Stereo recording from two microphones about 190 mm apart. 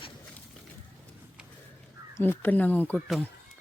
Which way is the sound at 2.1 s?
10° left (ahead or behind).